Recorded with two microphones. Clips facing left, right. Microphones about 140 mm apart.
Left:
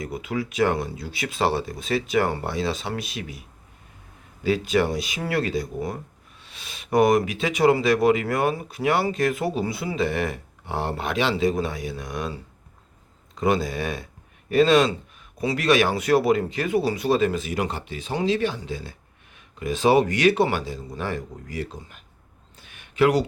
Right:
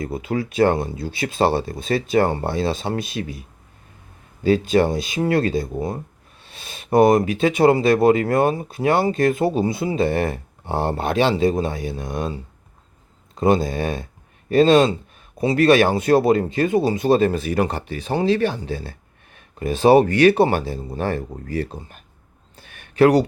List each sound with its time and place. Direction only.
0.0 s speech: 30° right (ahead or behind)
4.4 s speech: 30° right (ahead or behind)
13.4 s speech: 25° right (ahead or behind)
17.1 s speech: 50° right (ahead or behind)
20.3 s speech: 35° right (ahead or behind)
20.6 s speech: 55° right (ahead or behind)
21.8 s speech: 40° right (ahead or behind)
22.6 s a sound: 45° right (ahead or behind)